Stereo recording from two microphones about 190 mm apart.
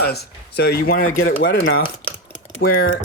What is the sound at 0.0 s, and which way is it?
Speech, 60° left (ahead or behind).